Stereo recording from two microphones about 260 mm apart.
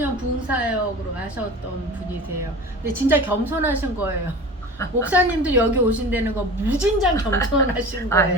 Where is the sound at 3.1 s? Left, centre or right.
Centre.